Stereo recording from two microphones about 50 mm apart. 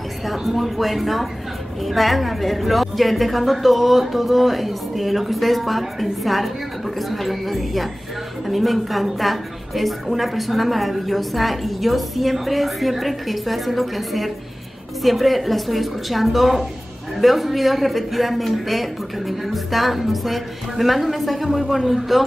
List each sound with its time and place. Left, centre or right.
0.3 s a woman's voice: centre